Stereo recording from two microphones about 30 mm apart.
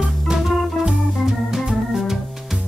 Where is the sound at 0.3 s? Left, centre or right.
Centre.